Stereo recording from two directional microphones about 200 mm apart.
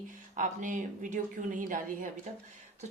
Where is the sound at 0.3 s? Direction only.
40° right (ahead or behind).